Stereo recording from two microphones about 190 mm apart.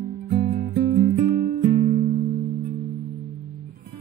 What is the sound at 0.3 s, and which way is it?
Music, 55° right (ahead or behind).